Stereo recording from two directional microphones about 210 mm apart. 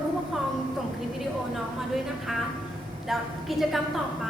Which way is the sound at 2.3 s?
Centre (ahead or behind).